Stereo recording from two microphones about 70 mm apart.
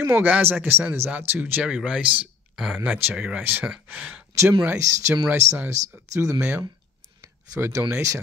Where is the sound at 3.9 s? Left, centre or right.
Right.